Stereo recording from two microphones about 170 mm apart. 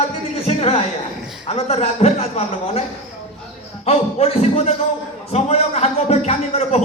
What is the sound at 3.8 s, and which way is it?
A man's voice, 40° left (ahead or behind).